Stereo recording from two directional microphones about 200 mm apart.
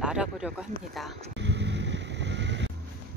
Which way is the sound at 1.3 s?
60° right (ahead or behind).